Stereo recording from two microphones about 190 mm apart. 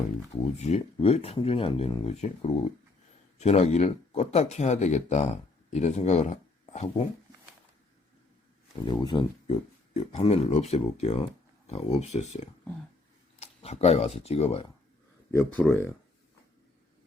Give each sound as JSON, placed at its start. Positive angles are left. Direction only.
{"t": 0.4, "sound": "speech", "side_deg": 35}
{"t": 8.8, "sound": "speech", "side_deg": 25}
{"t": 15.3, "sound": "speech", "side_deg": 10}